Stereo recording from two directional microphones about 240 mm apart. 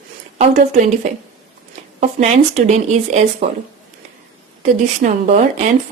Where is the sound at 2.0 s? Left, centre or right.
Right.